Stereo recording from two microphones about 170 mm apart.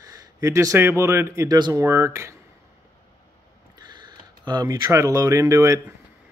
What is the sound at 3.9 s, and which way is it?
Speech, 25° right (ahead or behind).